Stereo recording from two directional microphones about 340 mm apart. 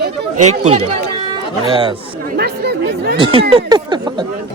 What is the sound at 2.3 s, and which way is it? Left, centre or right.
Speech, right.